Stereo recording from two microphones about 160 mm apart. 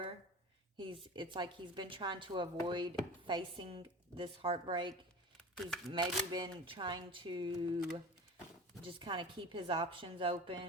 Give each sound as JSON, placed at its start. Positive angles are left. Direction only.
{"t": 0.8, "sound": "a woman's voice", "side_deg": -30}
{"t": 5.9, "sound": "a woman's voice", "side_deg": -30}
{"t": 8.8, "sound": "a woman's voice", "side_deg": -35}